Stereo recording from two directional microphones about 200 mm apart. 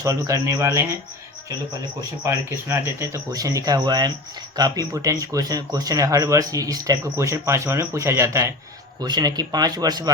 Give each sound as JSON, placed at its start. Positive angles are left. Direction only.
{"t": 0.0, "sound": "speech", "side_deg": -15}
{"t": 2.2, "sound": "speech", "side_deg": -10}